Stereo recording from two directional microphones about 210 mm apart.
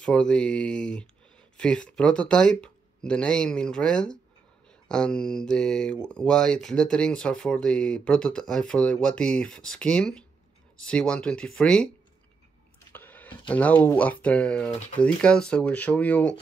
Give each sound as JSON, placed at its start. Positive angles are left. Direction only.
{"t": 0.0, "sound": "speech", "side_deg": 5}
{"t": 12.9, "sound": "speech", "side_deg": 10}